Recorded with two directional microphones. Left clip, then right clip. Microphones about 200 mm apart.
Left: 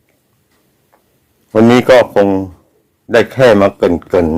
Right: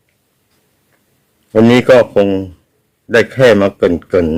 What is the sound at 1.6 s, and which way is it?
A man's voice, 15° right (ahead or behind).